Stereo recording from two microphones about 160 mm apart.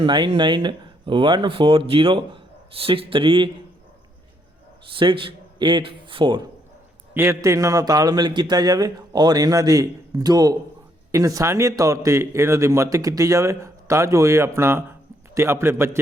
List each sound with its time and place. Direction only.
0.0 s speech: 30° right (ahead or behind)
4.9 s speech: 30° right (ahead or behind)
7.1 s a man's voice: 15° right (ahead or behind)